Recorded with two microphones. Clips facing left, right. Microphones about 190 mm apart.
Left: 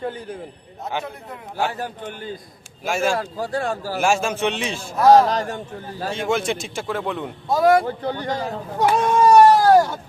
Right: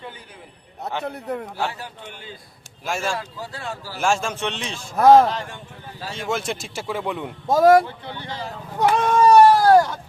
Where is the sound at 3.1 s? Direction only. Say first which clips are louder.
Left 7 dB; 45° left (ahead or behind).